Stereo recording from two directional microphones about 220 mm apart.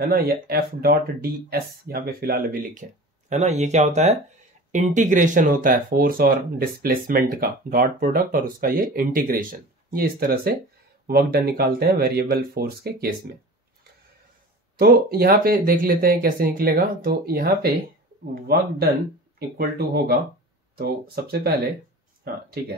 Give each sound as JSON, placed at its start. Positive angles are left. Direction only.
{"t": 0.0, "sound": "speech", "side_deg": -45}
{"t": 14.8, "sound": "speech", "side_deg": -45}